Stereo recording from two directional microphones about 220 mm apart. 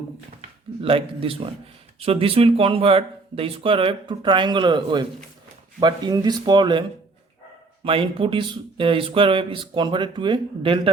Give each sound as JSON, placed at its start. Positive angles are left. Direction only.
{"t": 0.8, "sound": "speech", "side_deg": -25}
{"t": 7.9, "sound": "speech", "side_deg": -25}